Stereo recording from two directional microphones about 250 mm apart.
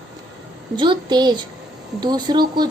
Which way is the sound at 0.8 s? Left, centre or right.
Centre.